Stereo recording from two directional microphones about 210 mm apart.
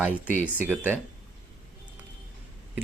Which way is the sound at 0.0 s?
10° right (ahead or behind).